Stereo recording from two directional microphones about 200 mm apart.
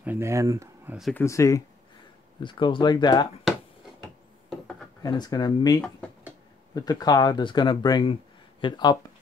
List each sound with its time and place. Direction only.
0.0 s speech: 10° right (ahead or behind)
0.9 s speech: centre (ahead or behind)
1.2 s speech: 15° left (ahead or behind)
4.5 s a sound: centre (ahead or behind)
5.0 s speech: 20° left (ahead or behind)